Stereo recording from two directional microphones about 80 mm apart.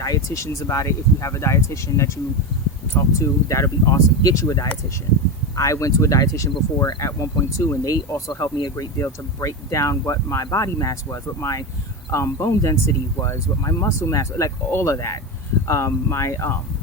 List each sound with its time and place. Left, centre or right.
0.0 s speech: left
8.3 s speech: left
8.7 s speech: left